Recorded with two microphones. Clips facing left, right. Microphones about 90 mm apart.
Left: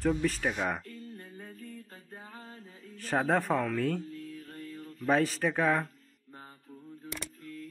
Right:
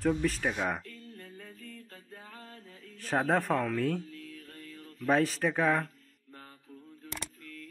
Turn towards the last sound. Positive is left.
turn(degrees=0)  # may be behind; listen again after turning